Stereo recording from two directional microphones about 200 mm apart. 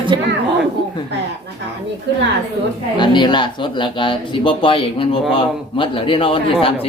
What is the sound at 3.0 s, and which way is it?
Speech, 25° left (ahead or behind).